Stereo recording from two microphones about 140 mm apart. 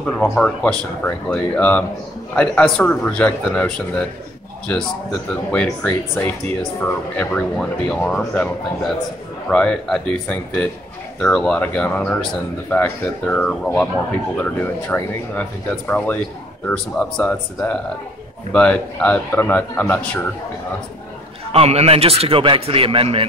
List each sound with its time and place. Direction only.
0.3 s speech: 5° left (ahead or behind)
16.6 s speech: 10° left (ahead or behind)
21.5 s a man's voice: 45° right (ahead or behind)